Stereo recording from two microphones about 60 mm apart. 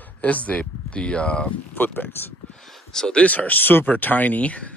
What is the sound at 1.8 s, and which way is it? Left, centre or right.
Speech, left.